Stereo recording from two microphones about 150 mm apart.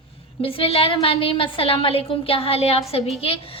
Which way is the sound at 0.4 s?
40° left (ahead or behind).